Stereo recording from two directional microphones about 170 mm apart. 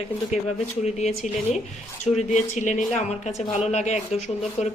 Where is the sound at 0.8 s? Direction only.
40° left (ahead or behind).